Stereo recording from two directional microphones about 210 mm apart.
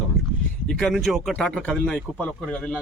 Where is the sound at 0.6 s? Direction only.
Centre (ahead or behind).